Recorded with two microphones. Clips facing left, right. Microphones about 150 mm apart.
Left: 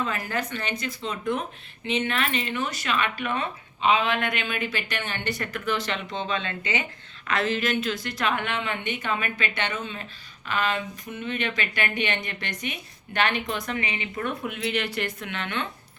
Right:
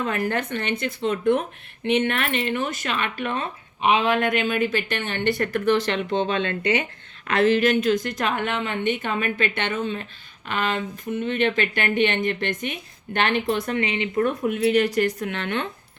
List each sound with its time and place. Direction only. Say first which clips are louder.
0.0 s speech: right 4 dB; 55° right (ahead or behind)
7.3 s a woman's voice: right 7 dB; 50° right (ahead or behind)
14.2 s speech: right 9 dB; 40° right (ahead or behind)